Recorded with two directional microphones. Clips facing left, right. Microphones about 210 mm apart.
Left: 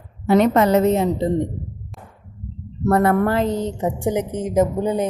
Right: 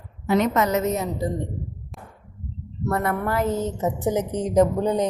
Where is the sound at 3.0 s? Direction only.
30° left (ahead or behind).